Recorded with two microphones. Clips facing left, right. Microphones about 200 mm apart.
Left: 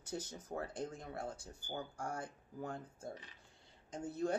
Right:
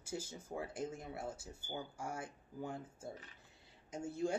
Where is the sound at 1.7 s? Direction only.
5° right (ahead or behind).